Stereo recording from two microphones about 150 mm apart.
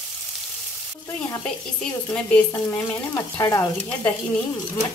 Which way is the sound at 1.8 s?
5° left (ahead or behind).